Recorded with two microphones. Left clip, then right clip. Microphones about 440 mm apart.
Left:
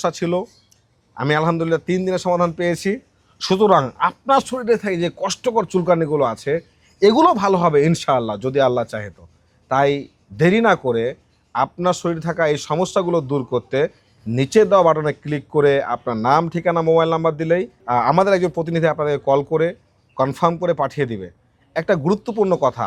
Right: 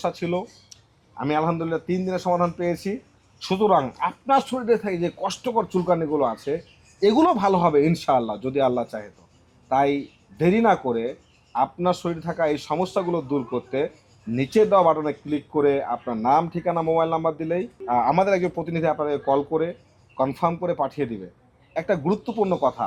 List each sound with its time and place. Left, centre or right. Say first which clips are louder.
0.0 s speech: left 5 dB; left